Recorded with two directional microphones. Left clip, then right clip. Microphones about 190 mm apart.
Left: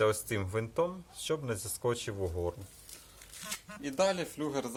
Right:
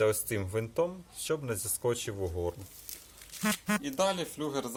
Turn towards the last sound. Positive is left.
turn(degrees=0)  # may be behind; listen again after turning